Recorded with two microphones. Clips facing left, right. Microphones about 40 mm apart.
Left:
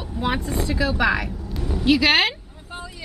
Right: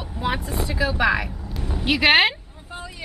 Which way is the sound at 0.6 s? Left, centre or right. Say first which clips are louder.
Right 1 dB; centre.